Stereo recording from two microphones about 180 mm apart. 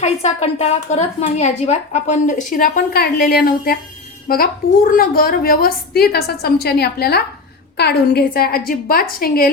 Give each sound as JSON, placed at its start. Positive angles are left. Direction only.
{"t": 0.0, "sound": "a woman's voice", "side_deg": 40}